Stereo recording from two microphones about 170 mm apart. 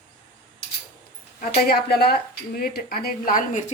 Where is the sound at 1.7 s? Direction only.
70° left (ahead or behind).